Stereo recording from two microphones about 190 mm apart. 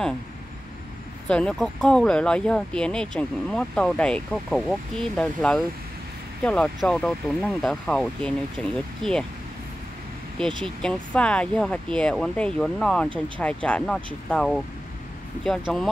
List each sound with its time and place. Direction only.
1.2 s speech: 5° left (ahead or behind)
10.6 s speech: 5° left (ahead or behind)